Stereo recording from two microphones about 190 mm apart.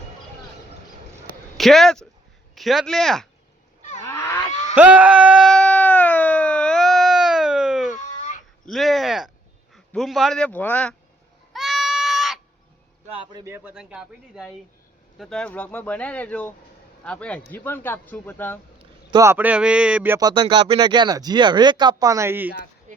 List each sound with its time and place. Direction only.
1.5 s a man's voice: centre (ahead or behind)
4.0 s livestock: 15° left (ahead or behind)
4.7 s a sound: 10° right (ahead or behind)
7.9 s a sound: 40° left (ahead or behind)
8.6 s a man's voice: centre (ahead or behind)
11.5 s goat: centre (ahead or behind)
13.1 s a man's voice: 30° right (ahead or behind)
13.4 s a man's voice: 10° right (ahead or behind); by 18.6 s 10° left (ahead or behind)
18.8 s a man's voice: 20° right (ahead or behind)
22.9 s a sound: 40° right (ahead or behind)